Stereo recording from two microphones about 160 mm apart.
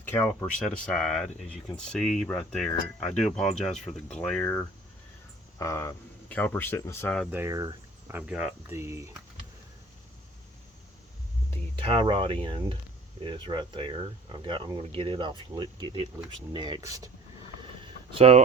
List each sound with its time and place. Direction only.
0.0 s speech: 15° left (ahead or behind)
7.3 s cricket: 15° right (ahead or behind)
8.1 s speech: 5° right (ahead or behind)
8.7 s speech: 20° right (ahead or behind)
11.5 s speech: 30° right (ahead or behind)
18.1 s speech: 40° right (ahead or behind)